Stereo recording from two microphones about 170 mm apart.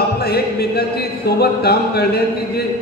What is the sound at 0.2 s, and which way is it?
Speech, 65° left (ahead or behind).